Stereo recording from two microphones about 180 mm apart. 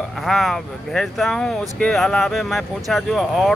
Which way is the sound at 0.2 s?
Centre (ahead or behind).